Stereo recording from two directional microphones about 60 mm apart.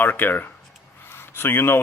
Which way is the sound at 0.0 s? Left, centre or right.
Left.